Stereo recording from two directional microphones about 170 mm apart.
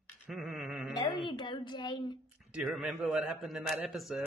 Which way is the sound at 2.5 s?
5° right (ahead or behind).